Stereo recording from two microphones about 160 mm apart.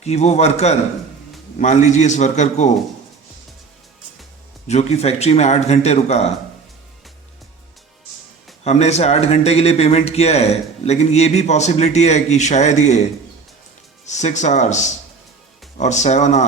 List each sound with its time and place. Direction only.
0.0 s speech: 45° left (ahead or behind)
4.7 s speech: 45° left (ahead or behind)
8.6 s speech: 45° left (ahead or behind)
14.0 s speech: 45° left (ahead or behind)
15.8 s speech: 45° left (ahead or behind)